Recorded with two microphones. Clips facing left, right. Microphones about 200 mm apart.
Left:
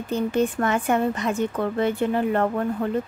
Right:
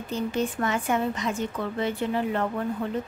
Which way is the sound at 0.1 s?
55° left (ahead or behind).